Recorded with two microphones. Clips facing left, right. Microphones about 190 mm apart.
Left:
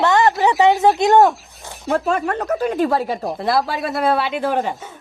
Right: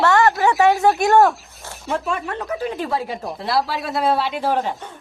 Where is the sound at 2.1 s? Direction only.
45° left (ahead or behind).